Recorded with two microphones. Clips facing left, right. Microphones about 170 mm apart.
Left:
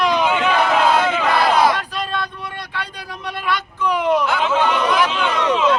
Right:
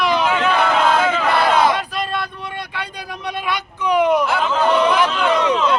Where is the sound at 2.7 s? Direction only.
15° right (ahead or behind).